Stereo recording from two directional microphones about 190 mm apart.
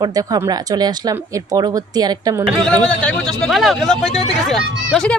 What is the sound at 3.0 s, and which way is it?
Speech, 5° left (ahead or behind).